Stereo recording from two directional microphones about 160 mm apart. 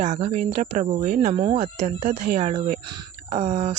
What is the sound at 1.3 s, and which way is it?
Speech, 30° right (ahead or behind).